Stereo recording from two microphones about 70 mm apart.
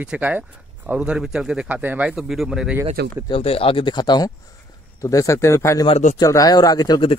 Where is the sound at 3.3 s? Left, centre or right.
Left.